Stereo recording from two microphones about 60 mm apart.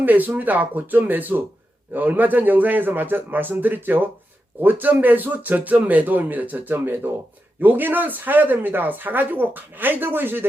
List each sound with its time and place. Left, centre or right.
0.0 s speech: right